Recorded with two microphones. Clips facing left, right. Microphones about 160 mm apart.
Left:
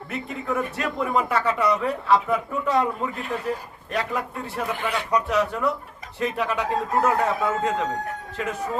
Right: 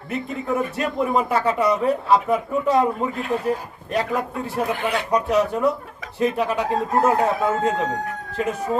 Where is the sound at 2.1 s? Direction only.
40° right (ahead or behind).